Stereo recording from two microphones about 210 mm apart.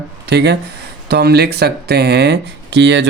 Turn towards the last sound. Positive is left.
turn(degrees=-55)  # may be behind; listen again after turning